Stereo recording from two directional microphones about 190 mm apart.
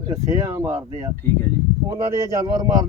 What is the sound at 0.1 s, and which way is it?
Speech, 15° right (ahead or behind).